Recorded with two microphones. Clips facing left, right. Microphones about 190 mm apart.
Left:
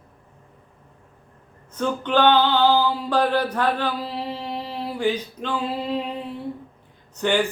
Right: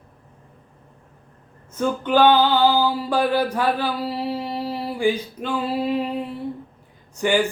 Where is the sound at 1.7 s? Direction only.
10° right (ahead or behind).